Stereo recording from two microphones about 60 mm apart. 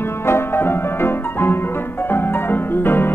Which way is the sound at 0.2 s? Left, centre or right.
Left.